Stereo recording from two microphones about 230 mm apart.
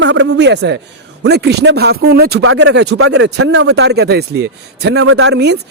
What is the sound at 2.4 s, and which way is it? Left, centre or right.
Speech, right.